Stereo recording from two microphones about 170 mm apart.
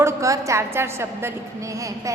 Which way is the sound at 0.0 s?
15° right (ahead or behind).